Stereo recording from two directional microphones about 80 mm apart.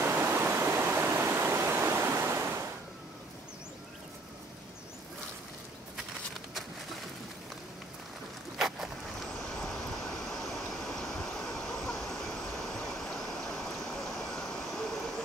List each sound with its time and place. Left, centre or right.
0.0 s waterfall: right
8.5 s boat: centre
10.5 s train: centre